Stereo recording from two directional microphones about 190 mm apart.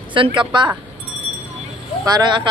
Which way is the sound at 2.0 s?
20° right (ahead or behind).